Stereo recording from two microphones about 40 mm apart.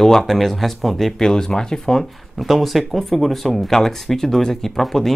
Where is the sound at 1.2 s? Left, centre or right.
Centre.